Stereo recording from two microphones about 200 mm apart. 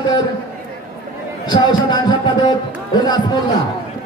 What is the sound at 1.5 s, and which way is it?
Speech, 20° left (ahead or behind).